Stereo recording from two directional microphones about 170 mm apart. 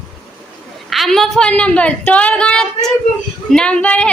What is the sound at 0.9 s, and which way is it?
A woman's voice, centre (ahead or behind).